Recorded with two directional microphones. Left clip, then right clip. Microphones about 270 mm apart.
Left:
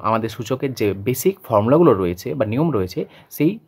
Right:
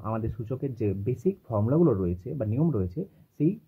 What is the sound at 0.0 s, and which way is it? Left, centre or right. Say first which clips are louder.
Speech: left 13 dB; left.